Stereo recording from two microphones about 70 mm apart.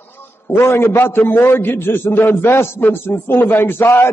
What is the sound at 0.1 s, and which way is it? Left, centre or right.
A man's voice, left.